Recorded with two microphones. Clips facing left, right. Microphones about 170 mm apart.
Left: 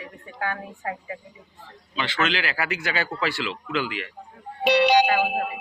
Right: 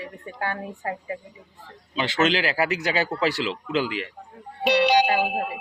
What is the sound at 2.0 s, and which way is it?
A woman's voice, 35° right (ahead or behind).